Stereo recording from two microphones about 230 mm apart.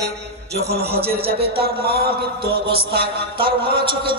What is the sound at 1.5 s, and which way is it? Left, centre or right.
Speech, right.